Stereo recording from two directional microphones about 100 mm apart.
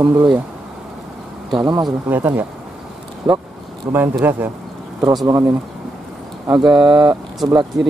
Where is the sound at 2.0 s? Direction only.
20° right (ahead or behind).